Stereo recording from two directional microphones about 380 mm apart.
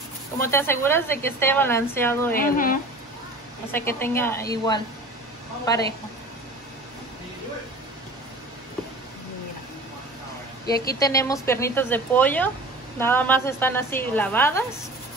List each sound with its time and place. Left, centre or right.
0.4 s a woman's voice: centre
2.3 s speech: left
3.7 s speech: centre
11.0 s a woman's voice: centre